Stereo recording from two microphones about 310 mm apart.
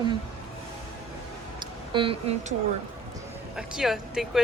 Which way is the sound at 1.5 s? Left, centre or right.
Centre.